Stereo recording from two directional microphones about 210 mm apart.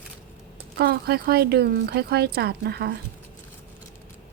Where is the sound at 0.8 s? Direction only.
50° right (ahead or behind).